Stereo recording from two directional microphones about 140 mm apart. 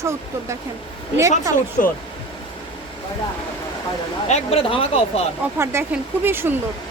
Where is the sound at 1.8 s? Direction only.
75° left (ahead or behind).